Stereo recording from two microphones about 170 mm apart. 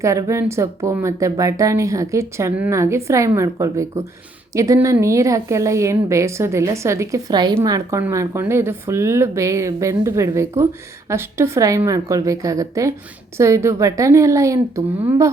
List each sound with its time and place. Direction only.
0.0 s speech: 15° right (ahead or behind)